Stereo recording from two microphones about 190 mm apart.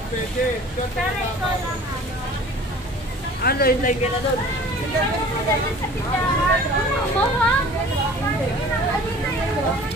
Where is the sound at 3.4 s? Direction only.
50° left (ahead or behind).